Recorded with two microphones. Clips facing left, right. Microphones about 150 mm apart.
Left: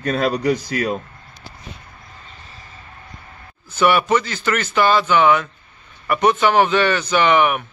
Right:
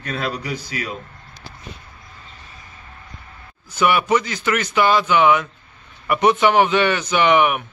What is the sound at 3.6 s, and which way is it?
A man's voice, 10° right (ahead or behind).